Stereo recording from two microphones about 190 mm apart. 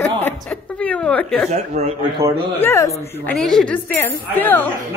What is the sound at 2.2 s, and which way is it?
Speech, 15° right (ahead or behind).